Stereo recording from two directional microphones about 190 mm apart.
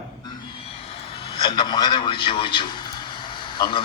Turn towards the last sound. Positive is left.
turn(degrees=25)  # may be behind; listen again after turning